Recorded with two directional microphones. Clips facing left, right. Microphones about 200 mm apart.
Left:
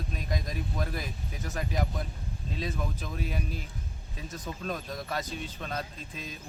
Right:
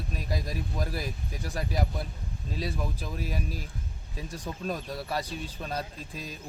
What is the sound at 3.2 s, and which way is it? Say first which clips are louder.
Speech: even; 40° right (ahead or behind).